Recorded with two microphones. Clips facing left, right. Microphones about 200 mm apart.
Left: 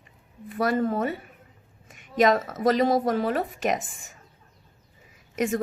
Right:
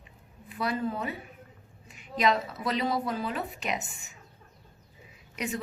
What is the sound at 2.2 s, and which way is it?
A woman's voice, 45° left (ahead or behind).